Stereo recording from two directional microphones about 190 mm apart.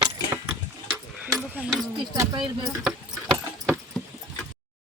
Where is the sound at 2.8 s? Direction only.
Centre (ahead or behind).